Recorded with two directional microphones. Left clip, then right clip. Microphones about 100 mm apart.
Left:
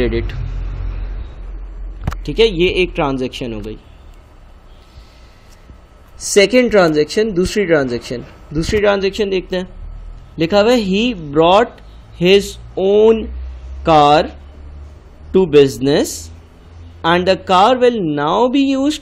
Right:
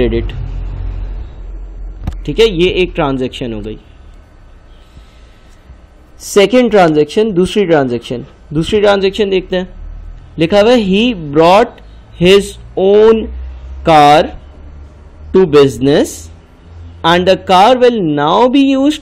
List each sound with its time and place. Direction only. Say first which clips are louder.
0.0 s speech: right 4 dB; 25° right (ahead or behind)
2.3 s speech: right 3 dB; 20° right (ahead or behind)
6.1 s speech: right 2 dB; 45° right (ahead or behind)
8.7 s speech: right 4 dB; 30° right (ahead or behind)
15.3 s speech: right 3 dB; 25° right (ahead or behind)